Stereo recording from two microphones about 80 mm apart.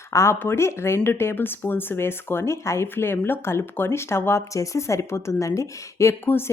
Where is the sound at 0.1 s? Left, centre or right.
Left.